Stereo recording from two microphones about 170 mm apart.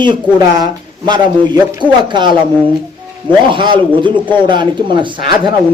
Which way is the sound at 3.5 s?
30° right (ahead or behind).